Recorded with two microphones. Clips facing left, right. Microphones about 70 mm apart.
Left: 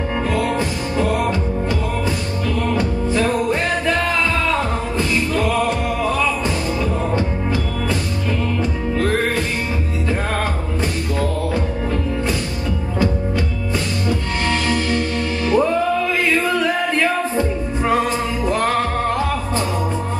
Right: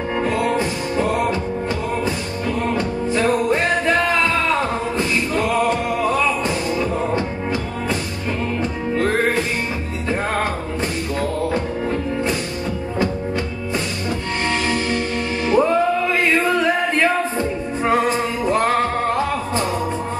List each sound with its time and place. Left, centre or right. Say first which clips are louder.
0.3 s music: even; centre
2.6 s music: left 1 dB; centre
8.9 s music: right 1 dB; centre
15.4 s music: right 1 dB; centre